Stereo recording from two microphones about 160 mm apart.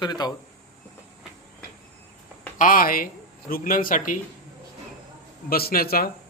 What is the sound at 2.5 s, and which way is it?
Speech, 60° left (ahead or behind).